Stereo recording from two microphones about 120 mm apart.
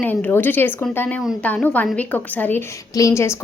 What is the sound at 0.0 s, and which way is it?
A woman's voice, 15° left (ahead or behind).